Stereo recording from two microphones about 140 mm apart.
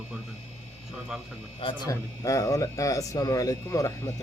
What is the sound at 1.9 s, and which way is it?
Speech, 25° left (ahead or behind).